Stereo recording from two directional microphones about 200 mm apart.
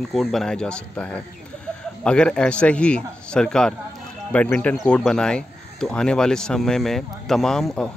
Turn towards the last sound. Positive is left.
turn(degrees=0)  # may be behind; listen again after turning